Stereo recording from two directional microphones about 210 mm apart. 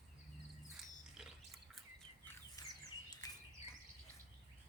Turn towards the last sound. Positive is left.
turn(degrees=15)  # may be behind; listen again after turning